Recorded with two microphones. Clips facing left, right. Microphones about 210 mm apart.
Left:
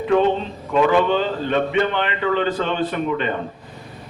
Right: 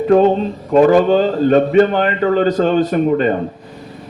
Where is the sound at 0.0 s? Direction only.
40° right (ahead or behind).